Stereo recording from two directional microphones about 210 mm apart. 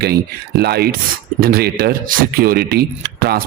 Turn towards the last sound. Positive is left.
turn(degrees=-50)  # may be behind; listen again after turning